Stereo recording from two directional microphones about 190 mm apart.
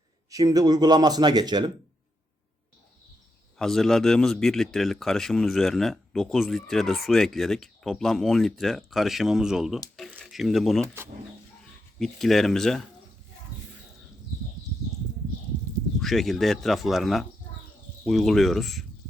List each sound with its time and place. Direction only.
0.3 s speech: 20° right (ahead or behind)
3.6 s a man's voice: centre (ahead or behind)
11.9 s a man's voice: centre (ahead or behind)
16.0 s a man's voice: centre (ahead or behind)